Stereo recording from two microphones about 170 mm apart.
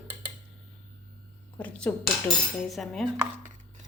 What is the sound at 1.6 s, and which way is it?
A woman's voice, 10° left (ahead or behind).